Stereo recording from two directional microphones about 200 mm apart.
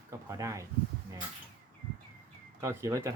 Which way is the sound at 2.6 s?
15° right (ahead or behind).